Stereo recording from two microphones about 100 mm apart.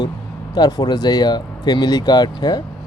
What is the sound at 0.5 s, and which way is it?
A man's voice, 40° left (ahead or behind).